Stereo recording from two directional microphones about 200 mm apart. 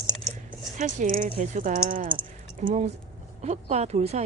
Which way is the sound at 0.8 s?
35° right (ahead or behind).